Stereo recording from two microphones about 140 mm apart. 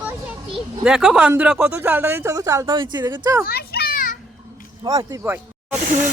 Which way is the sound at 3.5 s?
90° left.